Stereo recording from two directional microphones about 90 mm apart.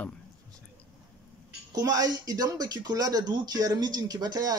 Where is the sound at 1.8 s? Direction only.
45° right (ahead or behind).